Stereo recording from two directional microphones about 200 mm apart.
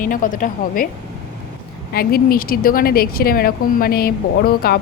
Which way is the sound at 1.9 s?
50° left (ahead or behind).